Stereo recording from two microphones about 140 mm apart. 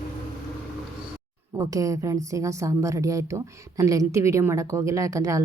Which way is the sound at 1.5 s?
25° right (ahead or behind).